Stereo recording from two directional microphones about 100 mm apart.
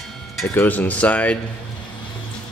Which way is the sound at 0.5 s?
15° left (ahead or behind).